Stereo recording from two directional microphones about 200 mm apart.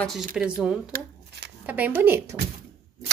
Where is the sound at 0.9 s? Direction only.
55° right (ahead or behind).